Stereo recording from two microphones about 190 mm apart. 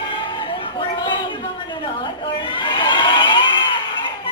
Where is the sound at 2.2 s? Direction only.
25° left (ahead or behind).